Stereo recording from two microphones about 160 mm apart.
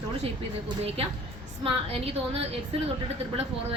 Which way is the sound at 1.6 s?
35° right (ahead or behind).